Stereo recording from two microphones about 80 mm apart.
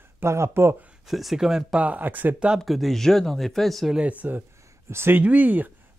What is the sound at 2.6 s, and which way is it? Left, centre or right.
Speech, centre.